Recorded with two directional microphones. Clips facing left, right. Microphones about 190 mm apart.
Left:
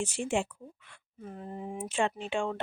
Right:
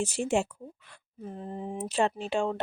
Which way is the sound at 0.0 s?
40° right (ahead or behind).